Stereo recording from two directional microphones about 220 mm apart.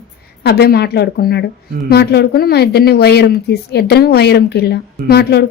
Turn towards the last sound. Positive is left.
turn(degrees=50)  # may be behind; listen again after turning